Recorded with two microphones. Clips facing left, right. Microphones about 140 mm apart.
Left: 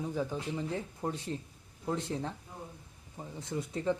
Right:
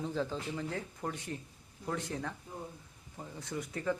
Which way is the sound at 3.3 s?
25° left (ahead or behind).